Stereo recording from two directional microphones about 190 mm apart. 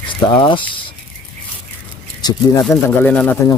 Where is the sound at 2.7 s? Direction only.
5° left (ahead or behind).